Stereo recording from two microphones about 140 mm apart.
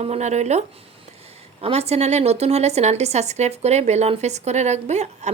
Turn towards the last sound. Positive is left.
turn(degrees=-55)  # may be behind; listen again after turning